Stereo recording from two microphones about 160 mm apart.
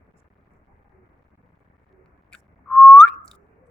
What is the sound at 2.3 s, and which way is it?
Whistling, 5° left (ahead or behind).